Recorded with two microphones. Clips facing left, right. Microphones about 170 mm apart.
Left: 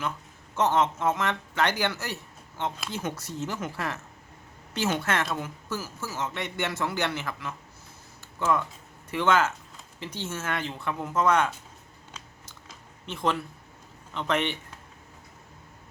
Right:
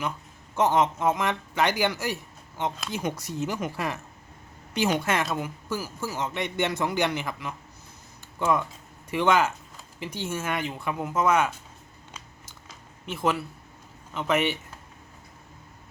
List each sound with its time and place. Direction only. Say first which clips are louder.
0.5 s a woman's voice: right 2 dB; 15° right (ahead or behind)
12.1 s a sound: even; 10° right (ahead or behind)
14.1 s a woman's voice: right 3 dB; 10° right (ahead or behind)